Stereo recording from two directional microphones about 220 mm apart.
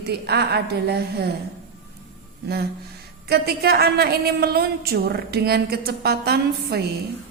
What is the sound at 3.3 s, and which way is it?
A woman's voice, 45° right (ahead or behind).